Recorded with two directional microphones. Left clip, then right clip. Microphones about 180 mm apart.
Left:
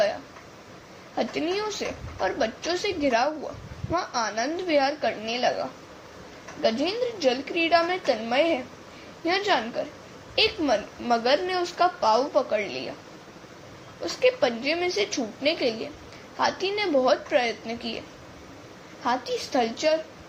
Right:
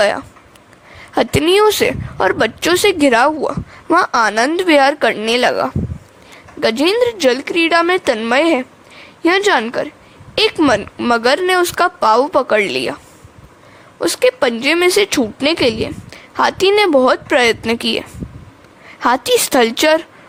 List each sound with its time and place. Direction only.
1.1 s a woman's voice: 60° right (ahead or behind)
14.0 s a woman's voice: 50° right (ahead or behind)
19.0 s speech: 50° right (ahead or behind)